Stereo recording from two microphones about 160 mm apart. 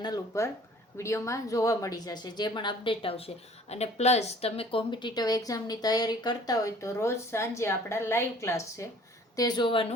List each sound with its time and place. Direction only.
0.0 s a woman's voice: 20° left (ahead or behind)